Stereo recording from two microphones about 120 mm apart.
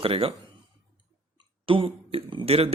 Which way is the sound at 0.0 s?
50° right (ahead or behind).